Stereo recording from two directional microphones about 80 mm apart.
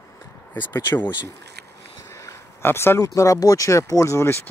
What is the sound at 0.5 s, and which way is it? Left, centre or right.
Speech, left.